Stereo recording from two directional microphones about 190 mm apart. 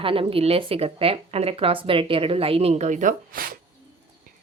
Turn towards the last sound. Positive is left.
turn(degrees=-50)  # may be behind; listen again after turning